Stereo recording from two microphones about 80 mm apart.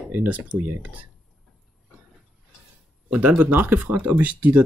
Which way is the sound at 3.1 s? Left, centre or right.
Centre.